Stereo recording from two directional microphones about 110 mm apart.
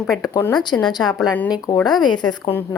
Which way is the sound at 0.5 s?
40° left (ahead or behind).